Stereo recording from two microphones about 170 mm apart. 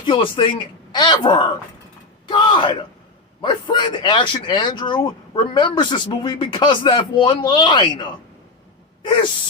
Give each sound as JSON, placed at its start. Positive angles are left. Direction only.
{"t": 0.0, "sound": "speech", "side_deg": 30}
{"t": 2.2, "sound": "a sound", "side_deg": 30}
{"t": 3.4, "sound": "speech", "side_deg": 30}